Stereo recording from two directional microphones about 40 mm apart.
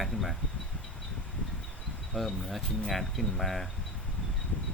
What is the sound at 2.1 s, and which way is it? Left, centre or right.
Speech, centre.